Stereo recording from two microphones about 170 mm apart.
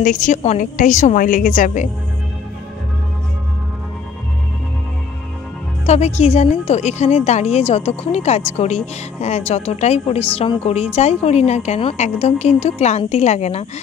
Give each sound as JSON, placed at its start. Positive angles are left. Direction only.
{"t": 0.0, "sound": "a woman's voice", "side_deg": 50}
{"t": 5.9, "sound": "a woman's voice", "side_deg": 40}